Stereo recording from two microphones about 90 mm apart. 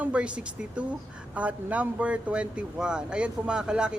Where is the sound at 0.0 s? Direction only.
10° right (ahead or behind).